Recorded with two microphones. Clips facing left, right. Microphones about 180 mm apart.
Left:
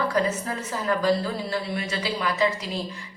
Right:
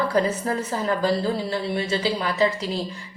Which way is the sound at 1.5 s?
30° right (ahead or behind).